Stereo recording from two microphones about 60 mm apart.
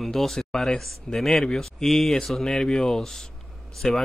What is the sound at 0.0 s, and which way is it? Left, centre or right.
Speech, centre.